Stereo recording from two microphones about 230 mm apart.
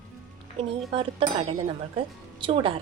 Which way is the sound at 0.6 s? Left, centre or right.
Right.